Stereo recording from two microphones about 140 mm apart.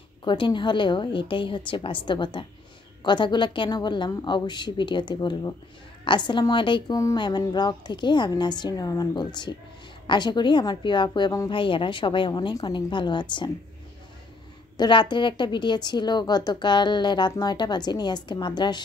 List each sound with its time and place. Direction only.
0.2 s a woman's voice: 35° left (ahead or behind)
14.8 s a woman's voice: 35° left (ahead or behind)